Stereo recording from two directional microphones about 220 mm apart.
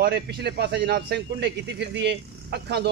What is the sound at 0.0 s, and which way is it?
A man's voice, 50° right (ahead or behind).